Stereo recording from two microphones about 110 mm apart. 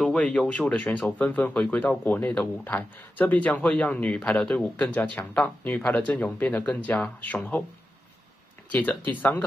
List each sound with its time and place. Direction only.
0.0 s speech: 10° left (ahead or behind)
8.7 s speech: 15° left (ahead or behind)